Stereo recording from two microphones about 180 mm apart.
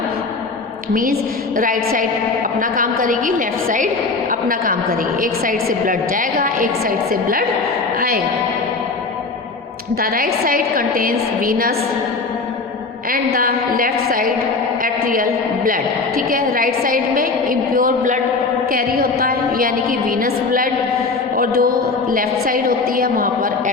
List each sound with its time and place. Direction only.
1.5 s a woman's voice: 50° right (ahead or behind)
10.0 s a woman's voice: 55° right (ahead or behind)
13.1 s a woman's voice: 55° right (ahead or behind)
21.3 s mantra: 55° right (ahead or behind)
22.1 s a woman's voice: 50° right (ahead or behind)